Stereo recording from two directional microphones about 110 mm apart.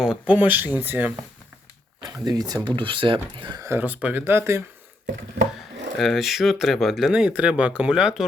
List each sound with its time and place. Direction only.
0.0 s speech: 10° right (ahead or behind)
2.0 s speech: 40° right (ahead or behind)
2.6 s speech: 50° right (ahead or behind)
3.6 s speech: 20° right (ahead or behind)
6.0 s speech: centre (ahead or behind)